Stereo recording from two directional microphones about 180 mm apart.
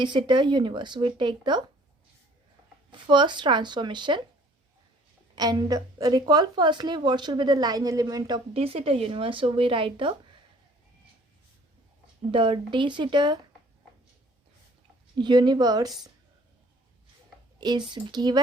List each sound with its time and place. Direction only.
0.0 s a woman's voice: 25° right (ahead or behind)
2.9 s a woman's voice: 25° right (ahead or behind)
5.3 s a woman's voice: 20° right (ahead or behind)
8.5 s a woman's voice: 30° right (ahead or behind)
12.3 s a woman's voice: 30° right (ahead or behind)
15.2 s a woman's voice: 25° right (ahead or behind)
17.6 s a woman's voice: 25° right (ahead or behind)